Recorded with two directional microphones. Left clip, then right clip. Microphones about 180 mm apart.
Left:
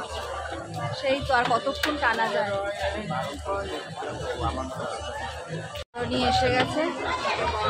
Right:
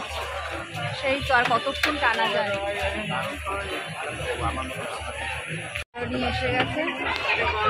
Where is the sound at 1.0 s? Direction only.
5° left (ahead or behind).